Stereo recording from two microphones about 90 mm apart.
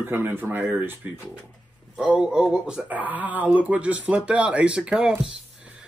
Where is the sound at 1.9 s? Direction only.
10° right (ahead or behind).